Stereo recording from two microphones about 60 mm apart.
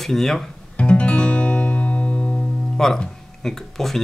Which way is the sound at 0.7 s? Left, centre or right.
Centre.